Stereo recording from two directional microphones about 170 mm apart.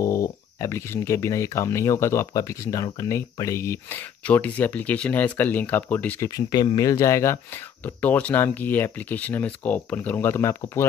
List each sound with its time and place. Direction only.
0.0 s speech: 20° left (ahead or behind)